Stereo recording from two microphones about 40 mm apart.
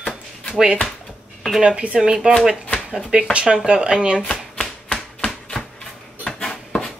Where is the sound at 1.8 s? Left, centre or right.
Right.